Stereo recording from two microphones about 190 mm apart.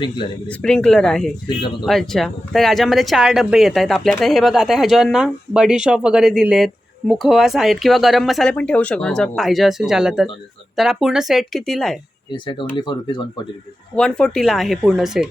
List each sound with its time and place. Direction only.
0.4 s speech: 5° left (ahead or behind)
12.3 s speech: 25° left (ahead or behind)
13.9 s speech: 5° left (ahead or behind)